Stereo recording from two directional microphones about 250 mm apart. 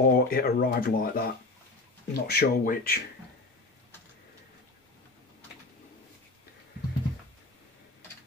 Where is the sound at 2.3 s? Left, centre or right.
Left.